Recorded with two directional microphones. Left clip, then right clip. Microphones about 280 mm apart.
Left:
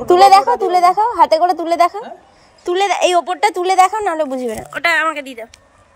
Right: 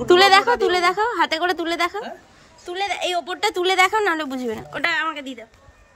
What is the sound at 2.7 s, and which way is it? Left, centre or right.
A woman's voice, centre.